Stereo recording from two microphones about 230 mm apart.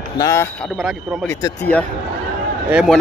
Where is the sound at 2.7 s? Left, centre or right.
Centre.